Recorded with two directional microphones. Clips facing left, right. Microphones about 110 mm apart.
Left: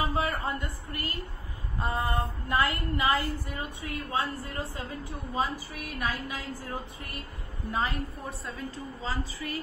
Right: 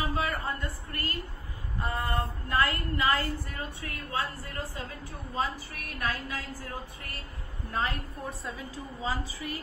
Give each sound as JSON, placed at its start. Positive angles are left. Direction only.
{"t": 0.1, "sound": "a woman's voice", "side_deg": 20}
{"t": 6.2, "sound": "a woman's voice", "side_deg": 20}
{"t": 7.7, "sound": "a woman's voice", "side_deg": 0}
{"t": 9.0, "sound": "a woman's voice", "side_deg": -15}